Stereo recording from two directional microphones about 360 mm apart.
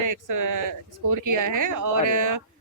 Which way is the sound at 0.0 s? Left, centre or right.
Right.